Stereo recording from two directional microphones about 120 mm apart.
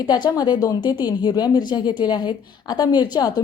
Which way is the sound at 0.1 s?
35° left (ahead or behind).